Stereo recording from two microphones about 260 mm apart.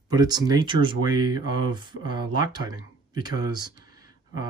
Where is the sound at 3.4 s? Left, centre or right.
Centre.